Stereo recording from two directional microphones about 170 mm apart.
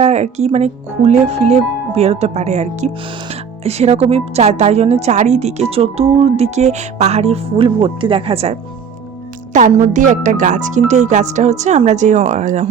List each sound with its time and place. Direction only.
0.0 s speech: 40° right (ahead or behind)
9.5 s speech: 45° right (ahead or behind)